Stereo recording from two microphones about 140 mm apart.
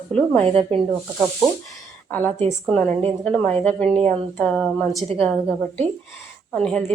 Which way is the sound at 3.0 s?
10° left (ahead or behind).